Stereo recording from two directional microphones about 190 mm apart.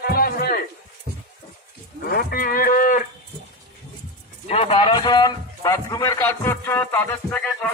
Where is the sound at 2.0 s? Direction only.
50° left (ahead or behind).